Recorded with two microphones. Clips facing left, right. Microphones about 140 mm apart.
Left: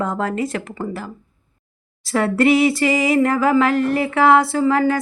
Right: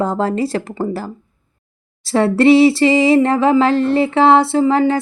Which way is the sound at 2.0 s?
30° right (ahead or behind).